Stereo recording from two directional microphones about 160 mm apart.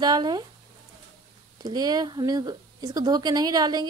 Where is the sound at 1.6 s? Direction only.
25° right (ahead or behind).